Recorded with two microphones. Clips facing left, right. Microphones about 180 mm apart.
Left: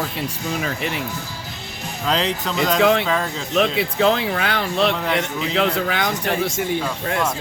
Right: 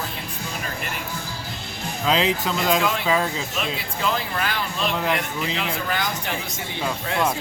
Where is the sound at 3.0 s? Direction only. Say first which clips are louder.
Even; 5° right (ahead or behind).